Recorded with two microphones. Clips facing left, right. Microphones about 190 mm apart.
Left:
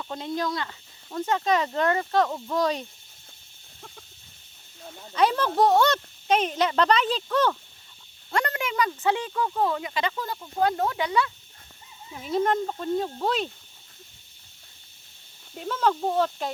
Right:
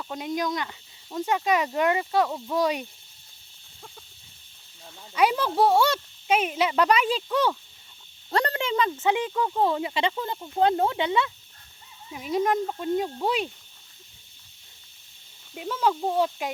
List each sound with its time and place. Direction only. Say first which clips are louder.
0.0 s speech: right 1 dB; 10° right (ahead or behind)
5.1 s speech: even; 10° right (ahead or behind)
8.3 s speech: right 2 dB; 35° right (ahead or behind)
12.1 s speech: even; 10° right (ahead or behind)
15.5 s speech: even; 10° right (ahead or behind)